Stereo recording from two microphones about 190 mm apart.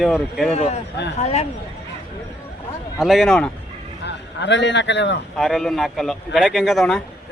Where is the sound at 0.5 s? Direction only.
35° left (ahead or behind).